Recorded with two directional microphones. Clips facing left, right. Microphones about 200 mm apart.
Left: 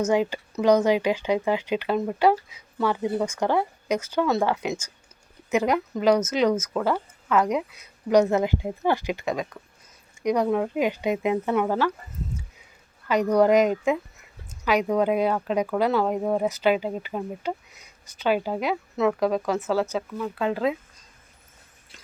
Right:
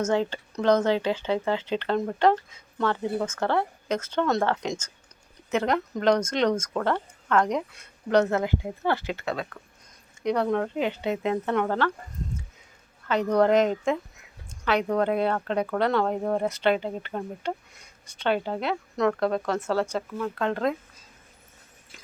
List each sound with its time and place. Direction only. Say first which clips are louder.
0.1 s speech: left 2 dB; 10° left (ahead or behind)
8.2 s speech: left 3 dB; 15° left (ahead or behind)
13.1 s speech: left 2 dB; 10° left (ahead or behind)